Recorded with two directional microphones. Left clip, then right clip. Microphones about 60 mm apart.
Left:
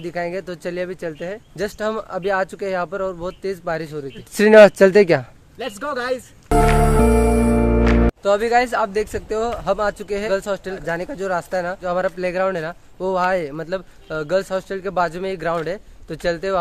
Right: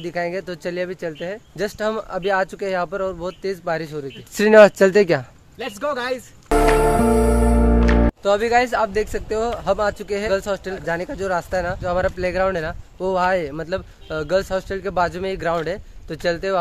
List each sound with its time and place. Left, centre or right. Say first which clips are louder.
0.0 s speech: right 1 dB; centre
4.6 s speech: left 2 dB; left
5.6 s speech: right 1 dB; left
6.8 s music: even; centre
8.2 s speech: even; centre
8.7 s speech: even; centre
13.5 s speech: even; centre